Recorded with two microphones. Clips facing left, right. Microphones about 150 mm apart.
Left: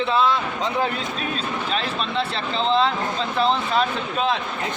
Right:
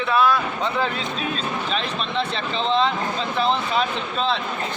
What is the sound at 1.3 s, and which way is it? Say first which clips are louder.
A man's voice: even; 5° left (ahead or behind).